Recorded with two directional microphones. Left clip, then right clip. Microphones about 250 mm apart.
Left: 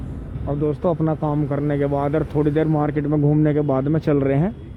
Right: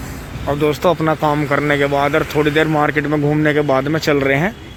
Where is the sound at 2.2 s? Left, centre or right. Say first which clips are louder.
Right 5 dB; centre.